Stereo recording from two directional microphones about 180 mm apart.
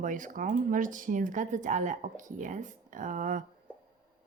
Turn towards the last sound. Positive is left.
turn(degrees=-45)  # may be behind; listen again after turning